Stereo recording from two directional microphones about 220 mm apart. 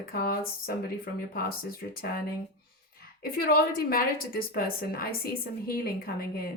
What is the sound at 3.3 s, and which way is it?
A woman's voice, 45° left (ahead or behind).